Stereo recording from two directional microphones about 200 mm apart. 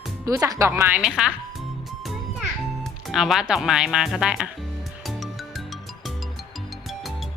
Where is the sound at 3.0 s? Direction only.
Centre (ahead or behind).